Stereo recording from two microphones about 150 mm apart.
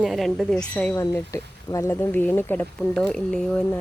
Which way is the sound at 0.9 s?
20° left (ahead or behind).